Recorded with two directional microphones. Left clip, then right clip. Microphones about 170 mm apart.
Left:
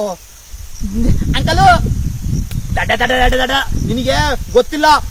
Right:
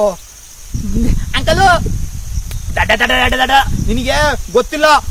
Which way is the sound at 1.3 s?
25° right (ahead or behind).